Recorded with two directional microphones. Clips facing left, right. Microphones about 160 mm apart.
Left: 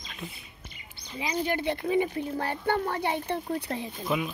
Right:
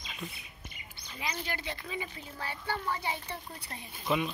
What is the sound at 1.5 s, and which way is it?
Speech, 55° left (ahead or behind).